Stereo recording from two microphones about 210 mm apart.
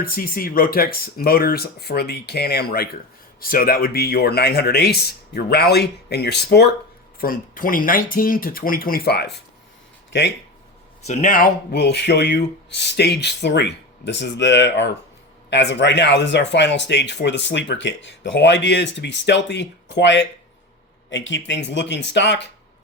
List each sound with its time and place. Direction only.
0.0 s speech: 45° left (ahead or behind)
11.0 s speech: 35° left (ahead or behind); by 22.4 s 55° left (ahead or behind)